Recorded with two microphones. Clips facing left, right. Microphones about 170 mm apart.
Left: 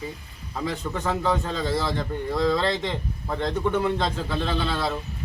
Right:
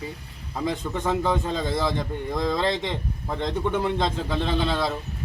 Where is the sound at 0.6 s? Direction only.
15° right (ahead or behind).